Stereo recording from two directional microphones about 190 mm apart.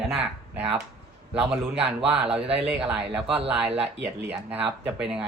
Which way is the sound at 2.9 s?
5° right (ahead or behind).